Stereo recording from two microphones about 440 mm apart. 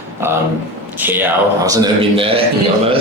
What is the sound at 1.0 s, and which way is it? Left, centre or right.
A man's voice, centre.